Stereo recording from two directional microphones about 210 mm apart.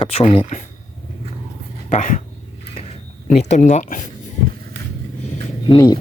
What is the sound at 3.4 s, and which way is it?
Speech, 35° left (ahead or behind).